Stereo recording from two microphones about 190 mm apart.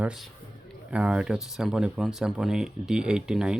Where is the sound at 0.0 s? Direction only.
5° right (ahead or behind).